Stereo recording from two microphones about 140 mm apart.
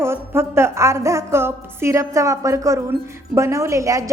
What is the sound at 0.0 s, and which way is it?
A woman's voice, 20° right (ahead or behind).